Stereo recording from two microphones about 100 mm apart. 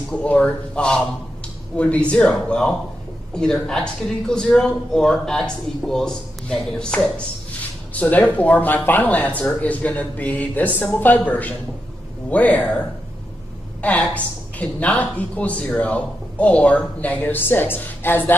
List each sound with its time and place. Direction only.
0.1 s speech: 15° left (ahead or behind)